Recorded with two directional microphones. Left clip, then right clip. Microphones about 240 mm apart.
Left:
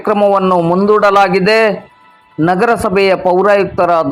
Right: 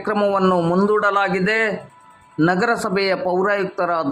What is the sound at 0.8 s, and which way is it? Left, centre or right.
A man's voice, centre.